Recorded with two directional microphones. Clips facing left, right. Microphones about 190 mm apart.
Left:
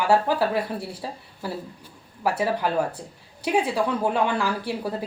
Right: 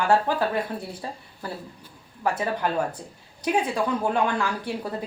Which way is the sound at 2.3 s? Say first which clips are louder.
Left 2 dB; 5° left (ahead or behind).